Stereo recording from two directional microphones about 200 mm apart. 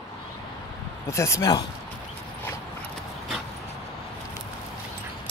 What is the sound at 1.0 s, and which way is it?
Speech, 15° left (ahead or behind).